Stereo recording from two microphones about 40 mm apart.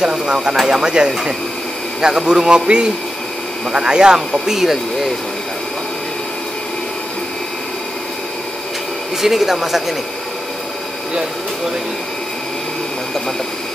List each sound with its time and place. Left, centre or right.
0.0 s a man's voice: centre
4.3 s a man's voice: centre
9.2 s a man's voice: centre